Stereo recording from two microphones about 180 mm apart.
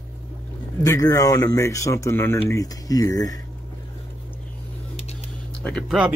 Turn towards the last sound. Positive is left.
turn(degrees=5)  # may be behind; listen again after turning